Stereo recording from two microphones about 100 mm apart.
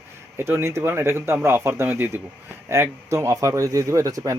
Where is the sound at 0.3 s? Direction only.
25° right (ahead or behind).